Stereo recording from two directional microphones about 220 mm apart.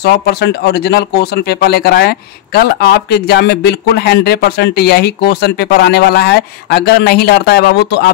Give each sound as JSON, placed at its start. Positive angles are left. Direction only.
{"t": 0.0, "sound": "speech", "side_deg": 45}